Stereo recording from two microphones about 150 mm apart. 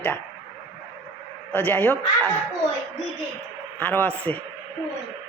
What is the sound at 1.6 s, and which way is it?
Speech, 10° left (ahead or behind).